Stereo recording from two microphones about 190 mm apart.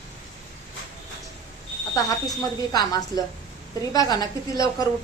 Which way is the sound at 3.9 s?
20° left (ahead or behind).